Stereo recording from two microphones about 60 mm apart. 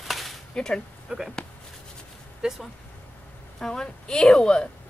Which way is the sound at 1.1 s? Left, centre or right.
Centre.